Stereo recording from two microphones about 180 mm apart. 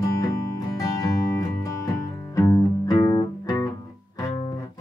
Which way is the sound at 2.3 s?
20° left (ahead or behind).